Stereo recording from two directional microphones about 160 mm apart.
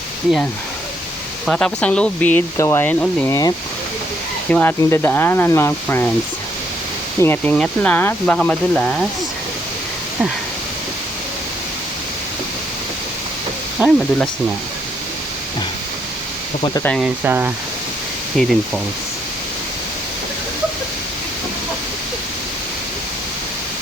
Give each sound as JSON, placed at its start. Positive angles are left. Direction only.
{"t": 1.5, "sound": "speech", "side_deg": 5}
{"t": 4.5, "sound": "speech", "side_deg": 15}
{"t": 7.2, "sound": "speech", "side_deg": 10}
{"t": 13.8, "sound": "speech", "side_deg": -10}
{"t": 17.0, "sound": "speech", "side_deg": -10}
{"t": 18.4, "sound": "speech", "side_deg": 0}